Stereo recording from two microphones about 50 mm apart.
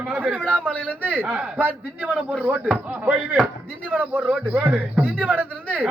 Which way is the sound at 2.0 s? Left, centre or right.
Right.